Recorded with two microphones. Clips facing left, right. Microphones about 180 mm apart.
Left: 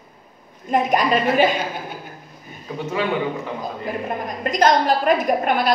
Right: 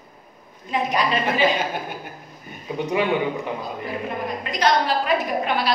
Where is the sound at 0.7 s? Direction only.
45° left (ahead or behind).